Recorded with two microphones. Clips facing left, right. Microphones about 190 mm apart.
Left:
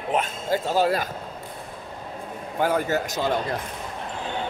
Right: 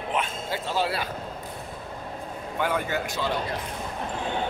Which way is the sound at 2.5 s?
40° left (ahead or behind).